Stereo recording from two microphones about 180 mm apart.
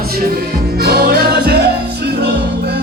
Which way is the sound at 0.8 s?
60° right (ahead or behind).